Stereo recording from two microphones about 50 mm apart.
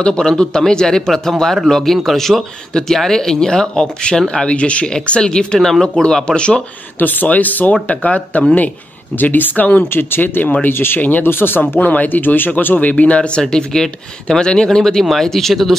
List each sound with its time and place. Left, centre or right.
0.0 s speech: centre
7.0 s speech: left
10.7 s speech: left
11.0 s speech: left
11.8 s speech: left
12.7 s speech: left
13.4 s speech: centre